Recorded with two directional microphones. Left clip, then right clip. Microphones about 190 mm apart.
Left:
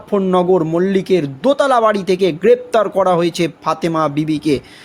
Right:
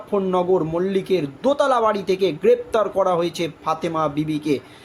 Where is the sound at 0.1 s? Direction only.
40° left (ahead or behind).